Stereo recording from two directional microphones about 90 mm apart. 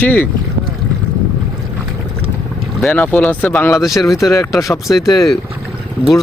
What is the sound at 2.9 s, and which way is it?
Speech, 15° left (ahead or behind).